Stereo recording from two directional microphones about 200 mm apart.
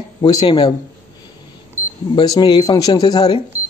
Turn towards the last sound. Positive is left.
turn(degrees=25)  # may be behind; listen again after turning